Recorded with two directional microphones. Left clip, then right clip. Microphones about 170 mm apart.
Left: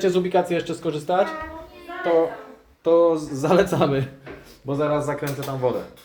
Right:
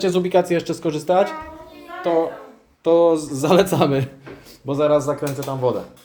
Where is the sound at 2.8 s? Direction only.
30° right (ahead or behind).